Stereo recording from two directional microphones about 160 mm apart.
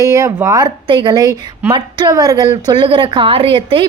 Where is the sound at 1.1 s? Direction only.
20° right (ahead or behind).